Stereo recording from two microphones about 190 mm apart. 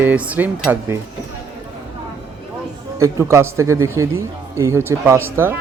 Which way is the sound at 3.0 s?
15° right (ahead or behind).